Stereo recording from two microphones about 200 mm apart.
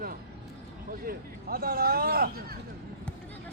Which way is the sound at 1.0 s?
50° right (ahead or behind).